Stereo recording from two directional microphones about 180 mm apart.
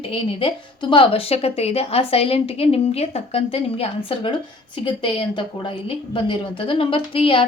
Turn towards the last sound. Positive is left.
turn(degrees=30)  # may be behind; listen again after turning